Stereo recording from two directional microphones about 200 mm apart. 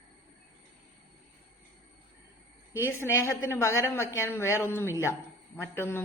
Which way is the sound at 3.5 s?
15° left (ahead or behind).